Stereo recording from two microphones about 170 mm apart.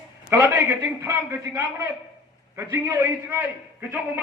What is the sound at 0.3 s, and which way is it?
A man's voice, 15° right (ahead or behind).